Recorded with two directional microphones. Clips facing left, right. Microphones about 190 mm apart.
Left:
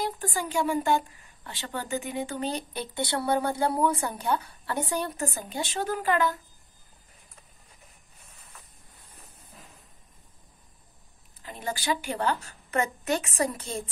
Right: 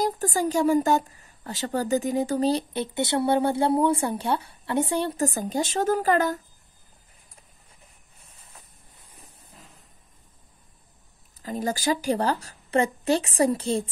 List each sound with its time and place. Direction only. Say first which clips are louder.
0.0 s a woman's voice: right 6 dB; 40° right (ahead or behind)
2.7 s speech: right 5 dB; 25° right (ahead or behind); by 6.4 s 40° right (ahead or behind)
11.4 s a woman's voice: right 5 dB; 40° right (ahead or behind)